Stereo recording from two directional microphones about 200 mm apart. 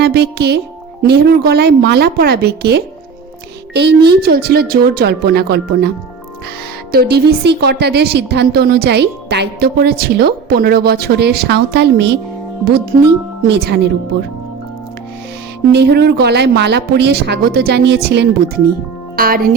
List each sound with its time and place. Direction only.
0.0 s a woman's voice: 55° right (ahead or behind)
6.9 s a woman's voice: 50° right (ahead or behind)
13.5 s speech: 55° right (ahead or behind)
15.7 s speech: 55° right (ahead or behind)